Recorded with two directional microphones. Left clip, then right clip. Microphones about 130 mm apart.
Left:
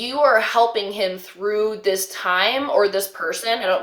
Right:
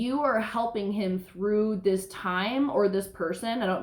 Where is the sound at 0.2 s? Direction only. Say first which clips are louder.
Left 13 dB; 25° left (ahead or behind).